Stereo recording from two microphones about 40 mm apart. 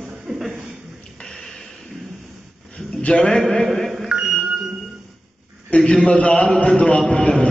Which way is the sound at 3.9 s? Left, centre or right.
Centre.